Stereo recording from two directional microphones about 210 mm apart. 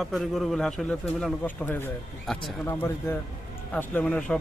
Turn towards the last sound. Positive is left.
turn(degrees=5)  # may be behind; listen again after turning